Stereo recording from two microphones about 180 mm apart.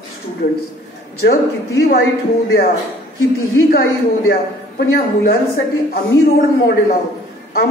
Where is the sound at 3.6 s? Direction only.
60° left (ahead or behind).